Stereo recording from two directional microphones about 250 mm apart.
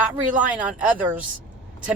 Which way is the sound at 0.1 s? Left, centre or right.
Centre.